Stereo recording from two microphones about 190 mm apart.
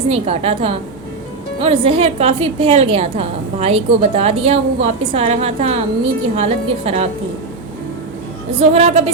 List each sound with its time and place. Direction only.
0.1 s a woman's voice: 30° right (ahead or behind)
8.5 s a woman's voice: 35° right (ahead or behind)